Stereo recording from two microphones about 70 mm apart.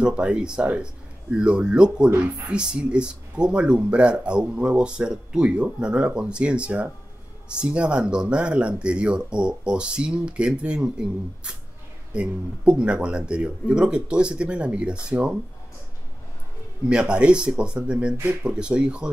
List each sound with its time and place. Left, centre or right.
0.0 s speech: centre
16.8 s speech: centre